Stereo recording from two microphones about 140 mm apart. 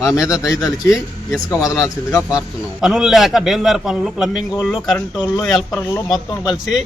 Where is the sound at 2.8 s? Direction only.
5° right (ahead or behind).